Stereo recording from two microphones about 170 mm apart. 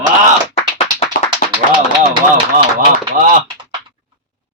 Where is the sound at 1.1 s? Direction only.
55° left (ahead or behind).